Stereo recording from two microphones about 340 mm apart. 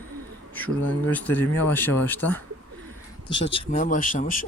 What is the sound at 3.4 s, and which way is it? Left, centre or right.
Speech, centre.